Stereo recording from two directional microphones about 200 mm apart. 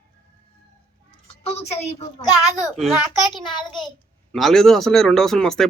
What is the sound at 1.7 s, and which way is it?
Speech, 30° left (ahead or behind).